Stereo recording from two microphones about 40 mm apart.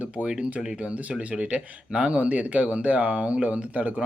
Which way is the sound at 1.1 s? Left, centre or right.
Right.